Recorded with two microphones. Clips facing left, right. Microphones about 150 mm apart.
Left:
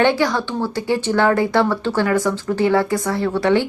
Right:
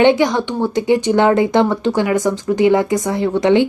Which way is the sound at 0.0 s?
20° right (ahead or behind).